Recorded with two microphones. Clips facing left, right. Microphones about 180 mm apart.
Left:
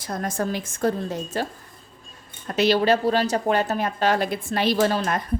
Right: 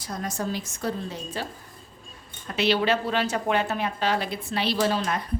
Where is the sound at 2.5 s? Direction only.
40° left (ahead or behind).